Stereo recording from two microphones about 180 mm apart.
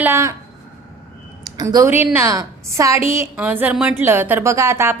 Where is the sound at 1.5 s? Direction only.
20° right (ahead or behind).